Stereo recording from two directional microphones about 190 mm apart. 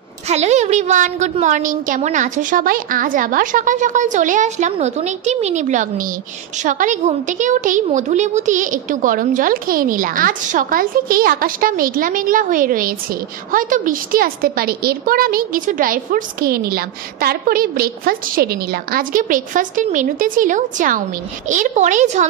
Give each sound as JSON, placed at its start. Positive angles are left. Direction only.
{"t": 0.3, "sound": "a woman's voice", "side_deg": -35}